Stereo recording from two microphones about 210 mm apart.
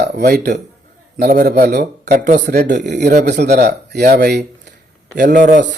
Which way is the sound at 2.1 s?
40° right (ahead or behind).